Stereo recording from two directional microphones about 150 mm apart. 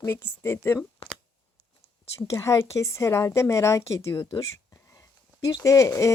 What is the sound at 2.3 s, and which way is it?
Speech, 20° left (ahead or behind).